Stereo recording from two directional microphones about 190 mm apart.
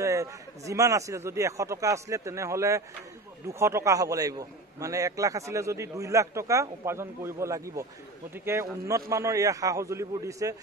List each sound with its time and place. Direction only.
0.0 s a man's voice: 15° right (ahead or behind)
9.1 s a man's voice: 15° right (ahead or behind)